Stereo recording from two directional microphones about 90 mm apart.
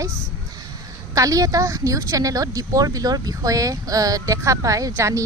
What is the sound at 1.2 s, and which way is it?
Speech, 40° right (ahead or behind).